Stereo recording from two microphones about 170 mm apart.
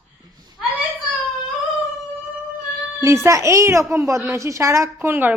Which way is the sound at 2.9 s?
15° right (ahead or behind).